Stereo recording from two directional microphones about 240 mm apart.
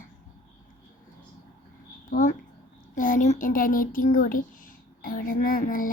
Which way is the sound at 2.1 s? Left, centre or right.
Left.